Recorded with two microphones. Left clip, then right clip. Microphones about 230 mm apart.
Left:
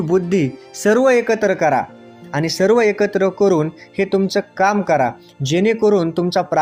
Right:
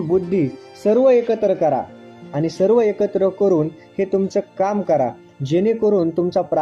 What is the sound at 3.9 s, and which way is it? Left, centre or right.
Speech, centre.